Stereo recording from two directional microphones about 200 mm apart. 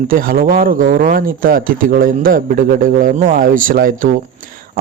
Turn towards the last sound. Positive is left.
turn(degrees=-45)  # may be behind; listen again after turning